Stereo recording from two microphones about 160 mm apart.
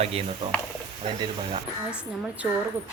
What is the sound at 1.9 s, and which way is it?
Speech, 5° right (ahead or behind).